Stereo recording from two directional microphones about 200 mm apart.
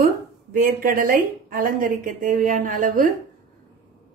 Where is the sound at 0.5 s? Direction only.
45° right (ahead or behind).